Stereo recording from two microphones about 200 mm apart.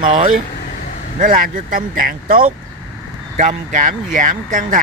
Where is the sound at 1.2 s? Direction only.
45° right (ahead or behind).